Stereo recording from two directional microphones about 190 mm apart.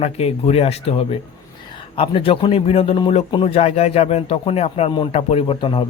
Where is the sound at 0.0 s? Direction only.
35° left (ahead or behind).